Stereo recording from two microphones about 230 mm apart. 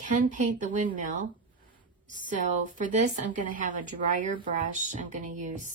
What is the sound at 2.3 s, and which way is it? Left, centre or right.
A woman's voice, right.